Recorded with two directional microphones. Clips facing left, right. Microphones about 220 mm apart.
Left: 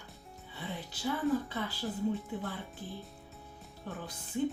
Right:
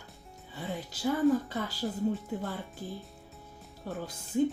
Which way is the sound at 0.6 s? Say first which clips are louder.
Right 4 dB; 40° right (ahead or behind).